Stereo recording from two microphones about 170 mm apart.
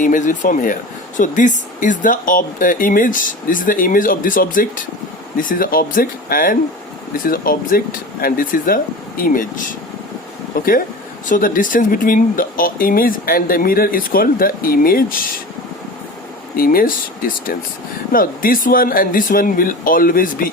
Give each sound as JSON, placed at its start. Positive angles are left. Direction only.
{"t": 0.0, "sound": "speech", "side_deg": 50}
{"t": 16.6, "sound": "speech", "side_deg": 55}